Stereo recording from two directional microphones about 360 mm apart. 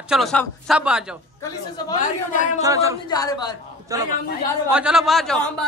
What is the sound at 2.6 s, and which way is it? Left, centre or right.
Speech, centre.